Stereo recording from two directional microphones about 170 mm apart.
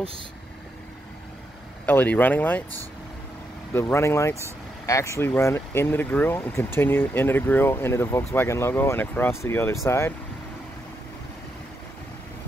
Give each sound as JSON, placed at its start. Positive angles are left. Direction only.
{"t": 1.9, "sound": "speech", "side_deg": 10}
{"t": 3.7, "sound": "speech", "side_deg": 15}